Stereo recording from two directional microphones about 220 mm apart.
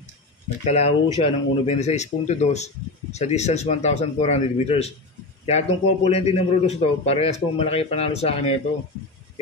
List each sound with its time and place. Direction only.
0.7 s speech: 30° left (ahead or behind)